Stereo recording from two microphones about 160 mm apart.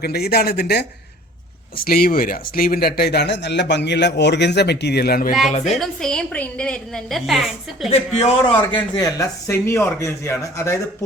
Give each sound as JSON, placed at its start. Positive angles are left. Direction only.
{"t": 0.0, "sound": "speech", "side_deg": 80}
{"t": 1.7, "sound": "speech", "side_deg": 65}
{"t": 5.5, "sound": "a woman's voice", "side_deg": 45}
{"t": 5.7, "sound": "a woman's voice", "side_deg": 0}
{"t": 7.9, "sound": "speech", "side_deg": 40}
{"t": 8.7, "sound": "speech", "side_deg": 25}